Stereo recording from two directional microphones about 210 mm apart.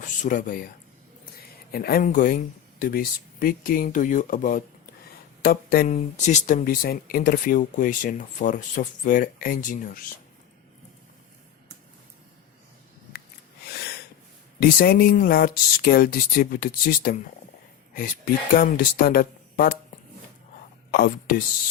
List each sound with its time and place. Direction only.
0.0 s speech: 40° left (ahead or behind)
1.7 s speech: 45° left (ahead or behind)
6.0 s speech: 35° left (ahead or behind)
13.7 s snort: 50° left (ahead or behind)
14.6 s speech: 45° left (ahead or behind)
18.5 s speech: 45° left (ahead or behind)
20.9 s speech: 45° left (ahead or behind)